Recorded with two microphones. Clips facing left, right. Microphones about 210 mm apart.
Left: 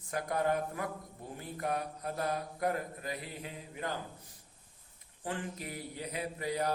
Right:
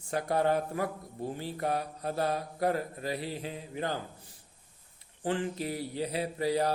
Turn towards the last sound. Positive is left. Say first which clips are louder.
# right 6 dB
turn(degrees=-30)  # may be behind; listen again after turning